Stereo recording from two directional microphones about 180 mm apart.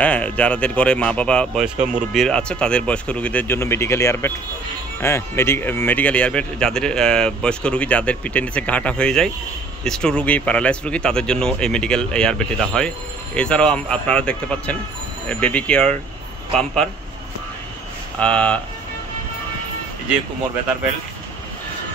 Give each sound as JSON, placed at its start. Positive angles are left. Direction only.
{"t": 0.0, "sound": "speech", "side_deg": 5}
{"t": 1.8, "sound": "speech", "side_deg": -45}
{"t": 2.1, "sound": "speech", "side_deg": 5}
{"t": 18.2, "sound": "speech", "side_deg": 5}